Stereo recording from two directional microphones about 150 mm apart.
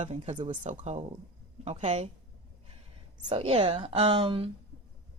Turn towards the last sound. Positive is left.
turn(degrees=-35)  # may be behind; listen again after turning